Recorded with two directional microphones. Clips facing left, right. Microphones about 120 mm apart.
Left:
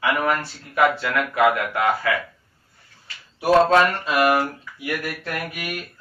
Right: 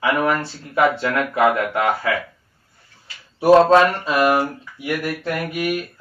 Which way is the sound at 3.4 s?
30° right (ahead or behind).